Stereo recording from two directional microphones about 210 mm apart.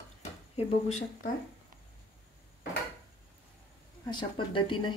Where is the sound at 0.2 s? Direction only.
30° left (ahead or behind).